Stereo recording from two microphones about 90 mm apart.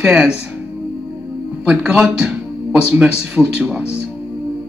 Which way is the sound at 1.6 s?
10° right (ahead or behind).